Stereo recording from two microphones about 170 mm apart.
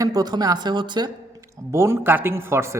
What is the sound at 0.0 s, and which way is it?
Speech, 20° right (ahead or behind).